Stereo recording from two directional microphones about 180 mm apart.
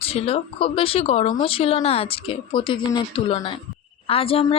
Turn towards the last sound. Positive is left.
turn(degrees=30)  # may be behind; listen again after turning